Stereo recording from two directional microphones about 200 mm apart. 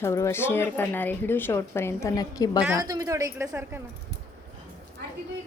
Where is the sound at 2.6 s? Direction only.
15° right (ahead or behind).